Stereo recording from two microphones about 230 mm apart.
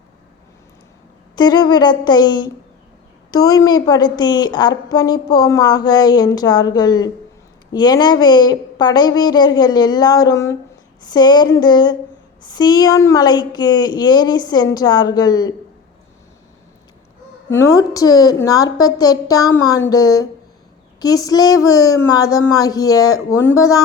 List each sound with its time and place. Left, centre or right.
1.4 s a woman's voice: centre
17.5 s a woman's voice: centre